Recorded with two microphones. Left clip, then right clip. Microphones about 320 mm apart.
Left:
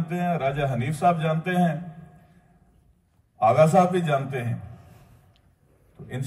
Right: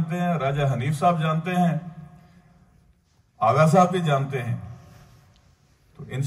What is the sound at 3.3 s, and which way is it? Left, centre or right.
A man's voice, right.